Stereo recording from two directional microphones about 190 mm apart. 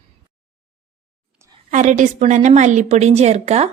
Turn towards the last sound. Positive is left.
turn(degrees=-35)  # may be behind; listen again after turning